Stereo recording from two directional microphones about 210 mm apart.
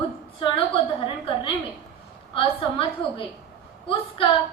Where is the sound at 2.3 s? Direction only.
25° left (ahead or behind).